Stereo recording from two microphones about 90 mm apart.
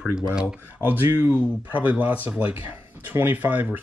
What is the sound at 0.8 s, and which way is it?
Speech, 20° right (ahead or behind).